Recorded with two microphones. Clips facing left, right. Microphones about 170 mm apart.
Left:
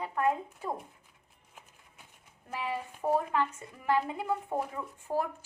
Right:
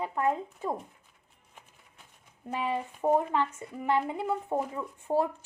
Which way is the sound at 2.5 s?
20° right (ahead or behind).